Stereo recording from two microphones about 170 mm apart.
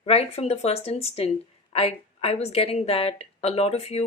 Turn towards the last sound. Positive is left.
turn(degrees=40)  # may be behind; listen again after turning